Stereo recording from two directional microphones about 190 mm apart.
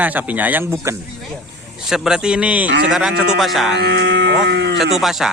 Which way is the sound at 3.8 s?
60° right (ahead or behind).